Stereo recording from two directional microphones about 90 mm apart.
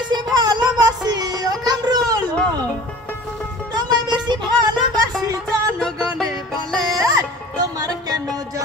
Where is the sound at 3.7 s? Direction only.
50° right (ahead or behind).